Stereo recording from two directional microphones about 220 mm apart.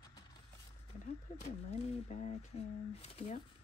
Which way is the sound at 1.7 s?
30° left (ahead or behind).